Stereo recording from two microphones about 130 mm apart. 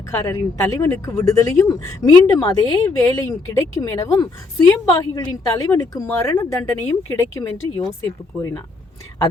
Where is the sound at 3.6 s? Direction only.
25° left (ahead or behind).